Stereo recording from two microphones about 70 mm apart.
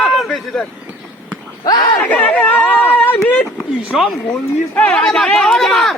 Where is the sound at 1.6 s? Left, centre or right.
Left.